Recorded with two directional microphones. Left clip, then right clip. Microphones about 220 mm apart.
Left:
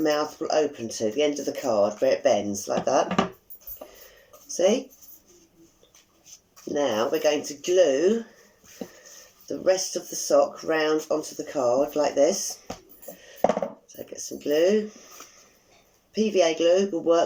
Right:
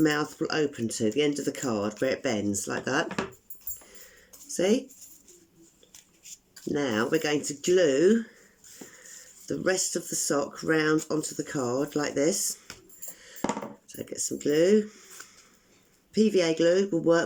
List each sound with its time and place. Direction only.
0.0 s speech: 55° right (ahead or behind)
4.4 s a sound: 60° right (ahead or behind)
6.7 s speech: 60° right (ahead or behind)
9.5 s speech: 55° right (ahead or behind)
13.8 s speech: 55° right (ahead or behind)
16.1 s speech: 55° right (ahead or behind)